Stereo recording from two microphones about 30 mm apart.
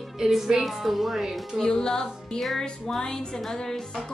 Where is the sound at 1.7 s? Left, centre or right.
Left.